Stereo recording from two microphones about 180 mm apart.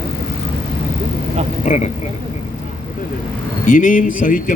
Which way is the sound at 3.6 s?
45° left (ahead or behind).